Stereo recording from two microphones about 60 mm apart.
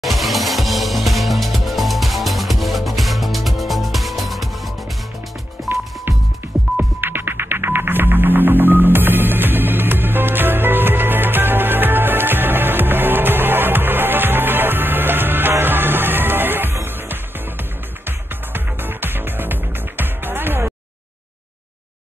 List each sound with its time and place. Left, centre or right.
0.0 s music: centre
6.5 s music: centre
7.0 s music: right
18.5 s music: right